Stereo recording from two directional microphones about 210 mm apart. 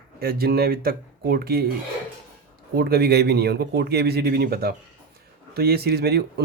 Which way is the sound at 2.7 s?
50° right (ahead or behind).